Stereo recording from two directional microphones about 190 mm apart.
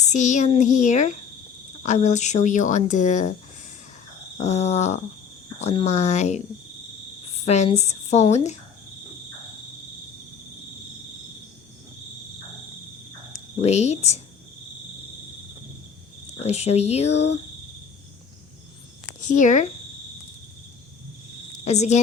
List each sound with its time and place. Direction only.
0.0 s speech: 40° left (ahead or behind)
4.4 s speech: 35° left (ahead or behind)
13.3 s speech: 35° left (ahead or behind)
16.4 s speech: 35° left (ahead or behind)
19.2 s speech: 40° left (ahead or behind)
21.6 s a woman's voice: 35° left (ahead or behind)